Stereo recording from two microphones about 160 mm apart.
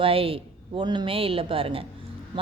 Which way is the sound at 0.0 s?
35° right (ahead or behind).